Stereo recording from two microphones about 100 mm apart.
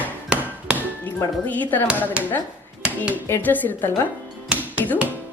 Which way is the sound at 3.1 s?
15° left (ahead or behind).